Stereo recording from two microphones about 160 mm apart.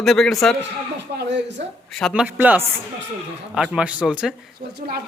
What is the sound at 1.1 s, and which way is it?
Speech, 90° right.